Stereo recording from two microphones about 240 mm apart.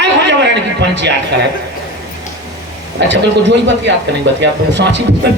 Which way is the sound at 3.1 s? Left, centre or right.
Right.